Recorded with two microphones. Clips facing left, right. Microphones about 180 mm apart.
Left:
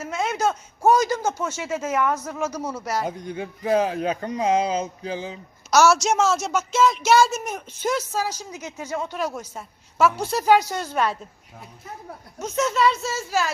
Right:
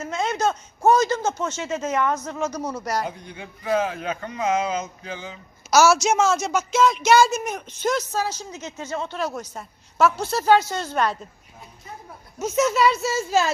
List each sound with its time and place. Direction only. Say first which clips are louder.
0.0 s a man's voice: even; 10° left (ahead or behind)
3.1 s speech: left 7 dB; 40° left (ahead or behind)
5.7 s a woman's voice: right 1 dB; 5° right (ahead or behind)
12.4 s speech: right 2 dB; 10° right (ahead or behind)